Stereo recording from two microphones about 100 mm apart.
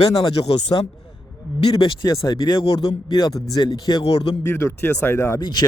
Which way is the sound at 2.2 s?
40° left (ahead or behind).